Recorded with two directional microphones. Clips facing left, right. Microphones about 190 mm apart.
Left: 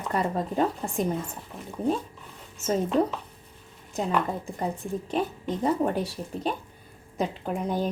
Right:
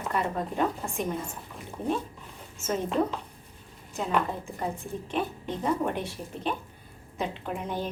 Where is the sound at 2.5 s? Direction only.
35° left (ahead or behind).